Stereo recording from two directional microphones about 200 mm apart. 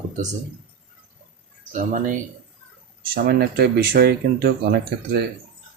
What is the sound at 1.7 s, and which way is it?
Speech, 40° right (ahead or behind).